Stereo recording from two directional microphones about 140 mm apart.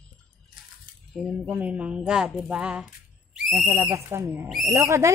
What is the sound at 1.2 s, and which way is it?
Speech, 5° right (ahead or behind).